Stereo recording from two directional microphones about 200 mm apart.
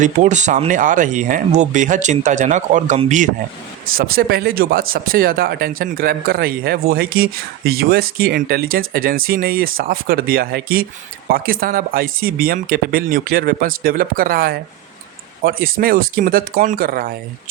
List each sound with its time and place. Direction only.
0.0 s speech: 35° right (ahead or behind)
3.9 s speech: 50° right (ahead or behind)